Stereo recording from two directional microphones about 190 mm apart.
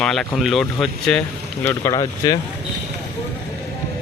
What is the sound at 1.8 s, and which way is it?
Speech, 20° left (ahead or behind).